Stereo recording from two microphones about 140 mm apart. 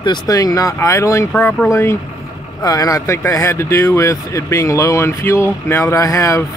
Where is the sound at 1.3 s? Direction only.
10° left (ahead or behind).